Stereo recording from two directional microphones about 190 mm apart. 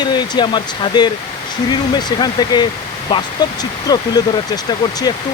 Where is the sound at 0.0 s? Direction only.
25° left (ahead or behind).